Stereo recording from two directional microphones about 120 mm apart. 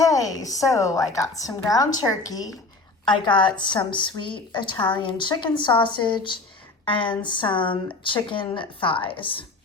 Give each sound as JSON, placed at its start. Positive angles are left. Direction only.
{"t": 0.0, "sound": "a woman's voice", "side_deg": 30}